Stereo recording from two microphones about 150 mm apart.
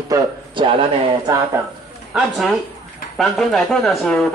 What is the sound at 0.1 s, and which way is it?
Speech, 35° right (ahead or behind).